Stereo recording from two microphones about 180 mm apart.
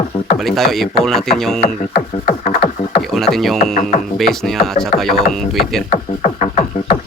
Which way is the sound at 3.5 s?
45° left (ahead or behind).